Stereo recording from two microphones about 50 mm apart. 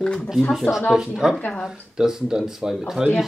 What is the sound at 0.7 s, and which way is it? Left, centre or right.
Speech, left.